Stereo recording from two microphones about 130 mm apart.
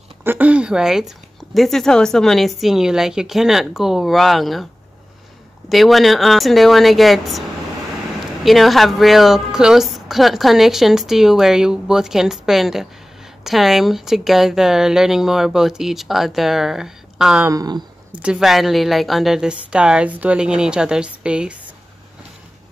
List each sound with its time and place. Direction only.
0.2 s speech: 15° right (ahead or behind)
5.7 s speech: centre (ahead or behind)
8.5 s speech: centre (ahead or behind)
17.5 s speech: 30° right (ahead or behind)
18.2 s a woman's voice: 5° right (ahead or behind)